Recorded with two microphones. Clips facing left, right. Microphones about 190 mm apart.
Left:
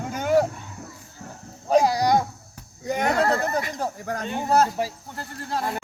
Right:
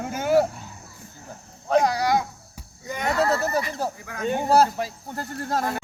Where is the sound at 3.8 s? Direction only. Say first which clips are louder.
Even; 10° right (ahead or behind).